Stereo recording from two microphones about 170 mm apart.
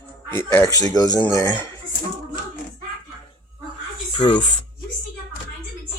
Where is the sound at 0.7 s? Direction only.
20° left (ahead or behind).